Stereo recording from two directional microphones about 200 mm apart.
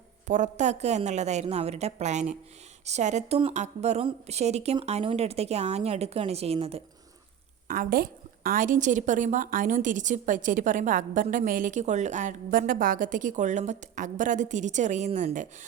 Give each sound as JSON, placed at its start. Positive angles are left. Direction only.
{"t": 0.3, "sound": "a woman's voice", "side_deg": -40}
{"t": 7.7, "sound": "a woman's voice", "side_deg": -45}